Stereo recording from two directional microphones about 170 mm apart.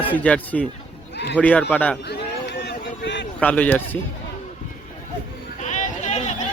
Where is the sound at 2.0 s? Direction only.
75° left (ahead or behind).